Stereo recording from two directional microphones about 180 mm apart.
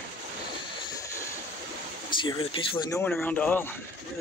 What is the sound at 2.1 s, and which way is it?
Speech, 25° left (ahead or behind).